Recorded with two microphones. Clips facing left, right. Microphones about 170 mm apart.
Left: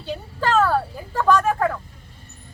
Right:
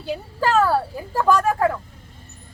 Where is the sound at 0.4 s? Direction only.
10° right (ahead or behind).